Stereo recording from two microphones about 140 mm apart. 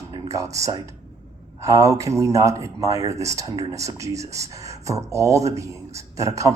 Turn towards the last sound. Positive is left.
turn(degrees=-20)  # may be behind; listen again after turning